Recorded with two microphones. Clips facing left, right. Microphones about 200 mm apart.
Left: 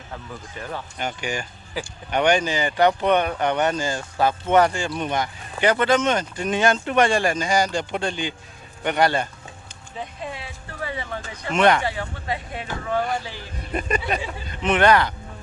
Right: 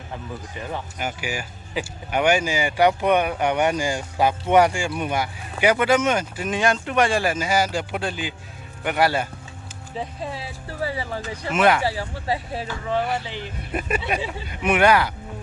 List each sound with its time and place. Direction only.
0.5 s speech: 10° right (ahead or behind)
10.0 s speech: 35° right (ahead or behind)
11.5 s speech: 5° right (ahead or behind)
11.8 s speech: 35° right (ahead or behind)
13.0 s speech: 5° right (ahead or behind)